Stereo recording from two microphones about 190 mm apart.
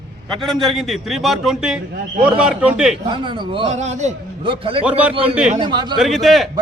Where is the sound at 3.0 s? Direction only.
25° right (ahead or behind).